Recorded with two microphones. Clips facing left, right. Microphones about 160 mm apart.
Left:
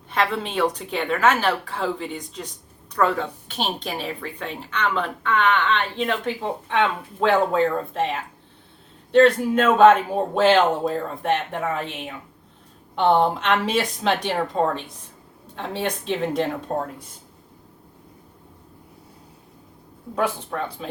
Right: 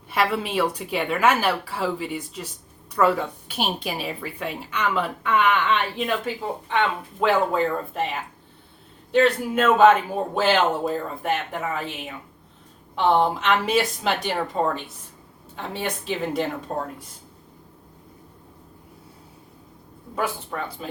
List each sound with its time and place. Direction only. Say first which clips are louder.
0.1 s speech: even; 10° right (ahead or behind)
9.1 s speech: left 4 dB; 5° right (ahead or behind)
13.1 s speech: left 1 dB; 5° right (ahead or behind)